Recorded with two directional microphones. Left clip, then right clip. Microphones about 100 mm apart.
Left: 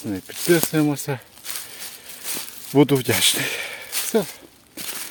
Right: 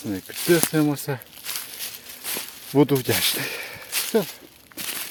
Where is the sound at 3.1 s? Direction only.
60° left (ahead or behind).